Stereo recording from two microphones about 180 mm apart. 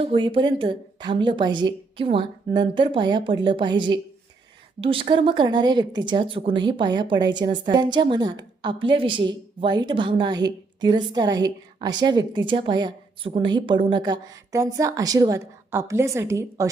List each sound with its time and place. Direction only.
0.0 s speech: 30° right (ahead or behind)